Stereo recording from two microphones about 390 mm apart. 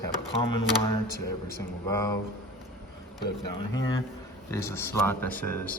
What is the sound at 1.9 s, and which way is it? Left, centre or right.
Speech, centre.